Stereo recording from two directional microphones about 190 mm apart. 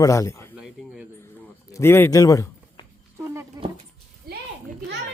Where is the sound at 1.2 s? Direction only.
10° left (ahead or behind).